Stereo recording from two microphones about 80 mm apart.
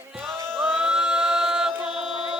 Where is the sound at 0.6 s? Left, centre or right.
Centre.